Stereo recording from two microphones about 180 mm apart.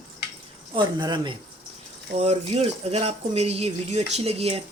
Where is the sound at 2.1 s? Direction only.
35° right (ahead or behind).